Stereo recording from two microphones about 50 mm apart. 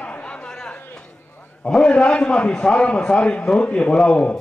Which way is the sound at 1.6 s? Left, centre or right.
Centre.